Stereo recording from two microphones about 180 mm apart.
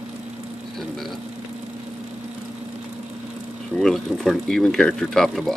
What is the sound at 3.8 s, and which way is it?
Speech, centre (ahead or behind).